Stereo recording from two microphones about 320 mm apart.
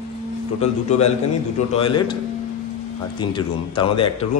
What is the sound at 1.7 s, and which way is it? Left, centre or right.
Speech, centre.